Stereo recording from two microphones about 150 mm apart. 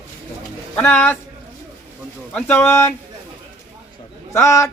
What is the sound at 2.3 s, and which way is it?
Speech, 15° left (ahead or behind).